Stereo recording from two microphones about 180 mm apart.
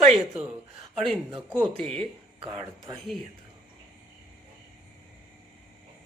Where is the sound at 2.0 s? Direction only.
30° right (ahead or behind).